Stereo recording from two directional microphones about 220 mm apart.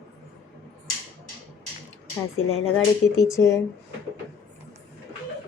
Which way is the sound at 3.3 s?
15° left (ahead or behind).